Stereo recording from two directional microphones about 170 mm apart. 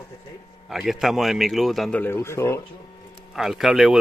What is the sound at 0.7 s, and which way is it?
A man's voice, centre (ahead or behind).